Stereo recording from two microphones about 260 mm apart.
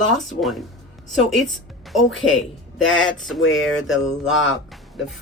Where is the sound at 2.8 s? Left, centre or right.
Left.